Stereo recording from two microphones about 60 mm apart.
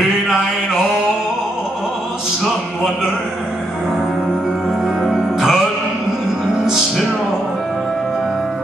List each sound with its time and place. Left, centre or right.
4.6 s music: centre